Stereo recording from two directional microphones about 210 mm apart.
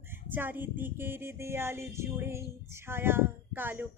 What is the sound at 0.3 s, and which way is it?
Female singing, 10° right (ahead or behind).